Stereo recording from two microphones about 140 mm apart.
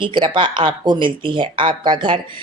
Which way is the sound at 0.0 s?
35° right (ahead or behind).